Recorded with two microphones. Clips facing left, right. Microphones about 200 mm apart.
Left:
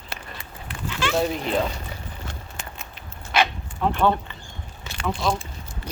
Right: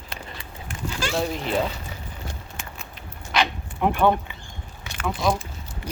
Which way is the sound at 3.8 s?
15° right (ahead or behind).